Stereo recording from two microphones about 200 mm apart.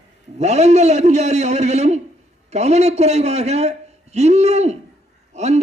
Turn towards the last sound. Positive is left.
turn(degrees=-35)  # may be behind; listen again after turning